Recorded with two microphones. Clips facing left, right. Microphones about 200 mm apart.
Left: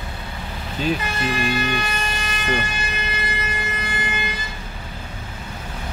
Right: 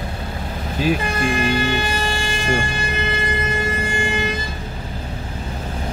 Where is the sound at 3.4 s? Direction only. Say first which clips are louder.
Right 6 dB; 25° right (ahead or behind).